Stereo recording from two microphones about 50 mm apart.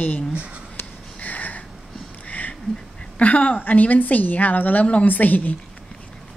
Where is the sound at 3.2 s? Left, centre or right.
Left.